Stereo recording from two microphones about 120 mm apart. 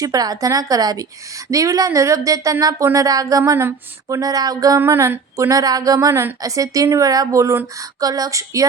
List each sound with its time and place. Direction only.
0.0 s a woman's voice: 30° right (ahead or behind)